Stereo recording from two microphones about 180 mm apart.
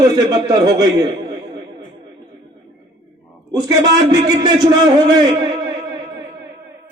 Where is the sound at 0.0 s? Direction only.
20° right (ahead or behind).